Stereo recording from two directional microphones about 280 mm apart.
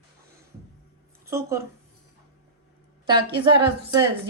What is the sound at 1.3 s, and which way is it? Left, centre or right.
Speech, centre.